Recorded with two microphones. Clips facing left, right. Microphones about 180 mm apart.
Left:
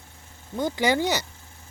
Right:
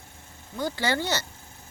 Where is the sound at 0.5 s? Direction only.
20° left (ahead or behind).